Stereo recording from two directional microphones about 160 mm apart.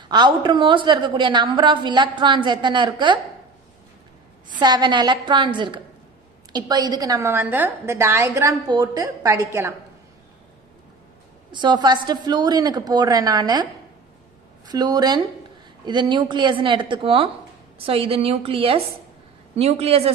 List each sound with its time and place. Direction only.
0.1 s a woman's voice: 30° right (ahead or behind)
4.6 s a woman's voice: 25° right (ahead or behind)
11.5 s a woman's voice: 30° right (ahead or behind)
14.7 s a woman's voice: 25° right (ahead or behind)